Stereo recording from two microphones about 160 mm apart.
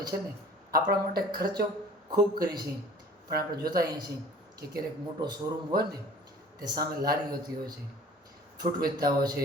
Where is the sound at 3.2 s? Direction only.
70° right (ahead or behind).